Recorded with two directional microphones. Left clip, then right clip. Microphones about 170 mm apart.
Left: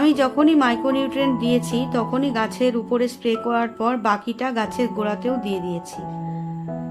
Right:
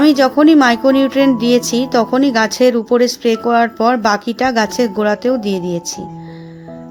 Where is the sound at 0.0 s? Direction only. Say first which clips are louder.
Right 7 dB; 35° right (ahead or behind).